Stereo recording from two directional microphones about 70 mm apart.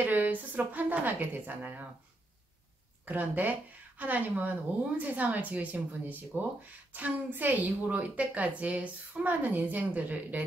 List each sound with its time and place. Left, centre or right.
0.0 s a woman's voice: right
3.1 s a woman's voice: right